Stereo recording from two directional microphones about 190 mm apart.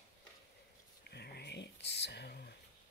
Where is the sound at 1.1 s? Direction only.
60° left (ahead or behind).